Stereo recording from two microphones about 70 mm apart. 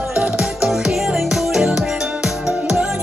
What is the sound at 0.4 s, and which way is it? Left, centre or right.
Music, centre.